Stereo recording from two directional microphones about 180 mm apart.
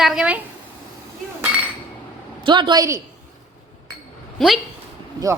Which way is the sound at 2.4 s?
25° right (ahead or behind).